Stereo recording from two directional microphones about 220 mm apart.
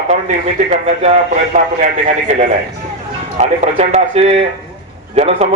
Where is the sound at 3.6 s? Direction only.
30° right (ahead or behind).